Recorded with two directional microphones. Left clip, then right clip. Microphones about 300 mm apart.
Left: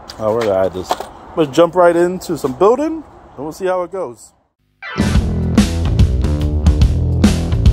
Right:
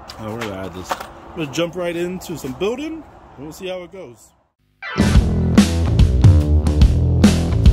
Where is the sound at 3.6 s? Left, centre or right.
Left.